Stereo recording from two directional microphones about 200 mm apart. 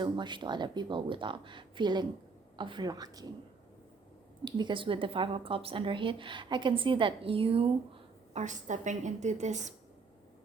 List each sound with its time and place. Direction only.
0.0 s speech: 25° right (ahead or behind)
4.4 s a woman's voice: 20° right (ahead or behind)